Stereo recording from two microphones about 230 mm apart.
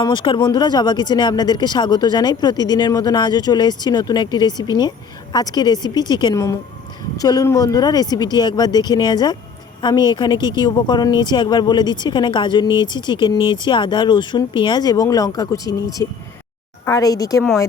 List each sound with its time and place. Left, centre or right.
0.0 s a woman's voice: centre